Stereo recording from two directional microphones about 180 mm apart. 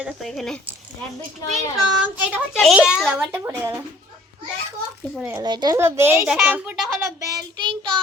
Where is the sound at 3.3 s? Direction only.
15° right (ahead or behind).